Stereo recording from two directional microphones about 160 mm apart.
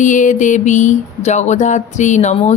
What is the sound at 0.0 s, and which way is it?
Speech, 50° left (ahead or behind).